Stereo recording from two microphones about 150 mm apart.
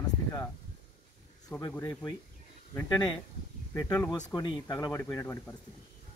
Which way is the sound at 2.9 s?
30° left (ahead or behind).